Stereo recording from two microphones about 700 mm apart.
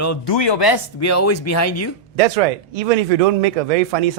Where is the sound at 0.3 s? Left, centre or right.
Left.